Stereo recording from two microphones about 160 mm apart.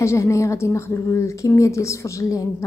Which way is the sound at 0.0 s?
20° left (ahead or behind).